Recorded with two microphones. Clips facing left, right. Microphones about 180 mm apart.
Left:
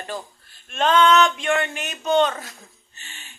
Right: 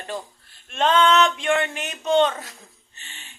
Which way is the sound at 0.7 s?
30° right (ahead or behind).